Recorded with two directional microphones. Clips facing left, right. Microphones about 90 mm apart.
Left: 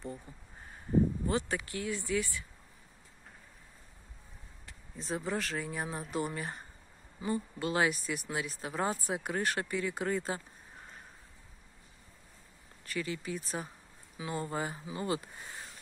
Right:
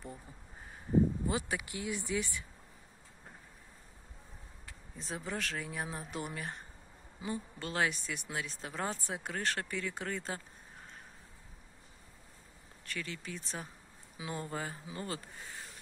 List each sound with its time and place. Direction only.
1.2 s speech: 10° right (ahead or behind)
4.9 s speech: centre (ahead or behind)
12.8 s speech: 5° left (ahead or behind)